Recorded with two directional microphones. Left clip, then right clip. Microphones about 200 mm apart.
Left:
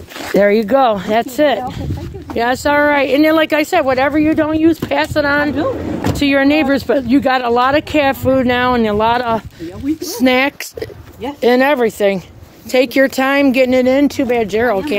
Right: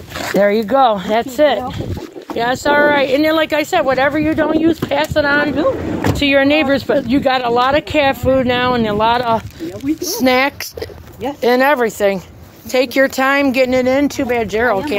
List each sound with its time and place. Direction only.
0.3 s speech: 65° left (ahead or behind)